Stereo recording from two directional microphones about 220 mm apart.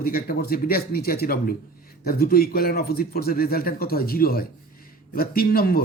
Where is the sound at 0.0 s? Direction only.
40° left (ahead or behind).